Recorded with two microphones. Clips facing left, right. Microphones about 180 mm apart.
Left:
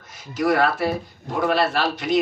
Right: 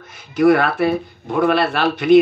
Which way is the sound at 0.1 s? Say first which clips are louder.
Right 7 dB; 60° right (ahead or behind).